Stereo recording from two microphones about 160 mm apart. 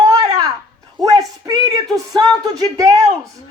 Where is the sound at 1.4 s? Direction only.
25° right (ahead or behind).